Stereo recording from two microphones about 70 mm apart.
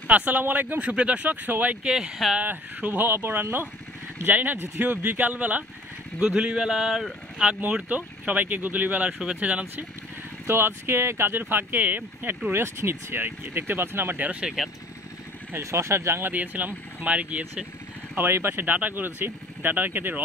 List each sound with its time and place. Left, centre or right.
0.1 s speech: right
1.9 s speech: centre
2.4 s speech: right; by 7.4 s centre
7.4 s speech: centre
10.4 s speech: right
14.4 s speech: centre
15.6 s speech: right
16.3 s speech: right
18.1 s speech: right